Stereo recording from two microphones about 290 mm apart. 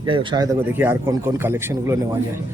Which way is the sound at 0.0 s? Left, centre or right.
Centre.